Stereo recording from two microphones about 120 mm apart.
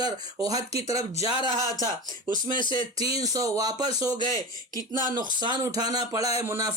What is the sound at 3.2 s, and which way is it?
Speech, 30° right (ahead or behind).